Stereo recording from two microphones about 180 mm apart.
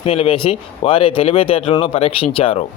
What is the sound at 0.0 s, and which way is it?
A man's voice, 30° left (ahead or behind).